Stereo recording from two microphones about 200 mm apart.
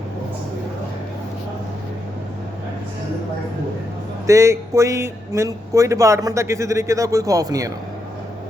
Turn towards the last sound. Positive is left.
turn(degrees=-15)  # may be behind; listen again after turning